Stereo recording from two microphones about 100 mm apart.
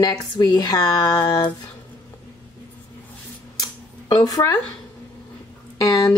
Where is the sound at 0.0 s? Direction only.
50° left (ahead or behind).